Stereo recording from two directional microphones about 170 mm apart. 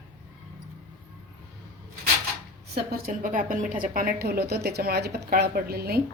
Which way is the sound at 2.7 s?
60° right (ahead or behind).